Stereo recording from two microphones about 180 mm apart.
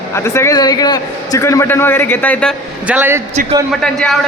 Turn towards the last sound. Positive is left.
turn(degrees=5)  # may be behind; listen again after turning